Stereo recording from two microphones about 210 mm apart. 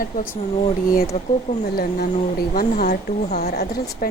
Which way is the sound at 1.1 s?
35° left (ahead or behind).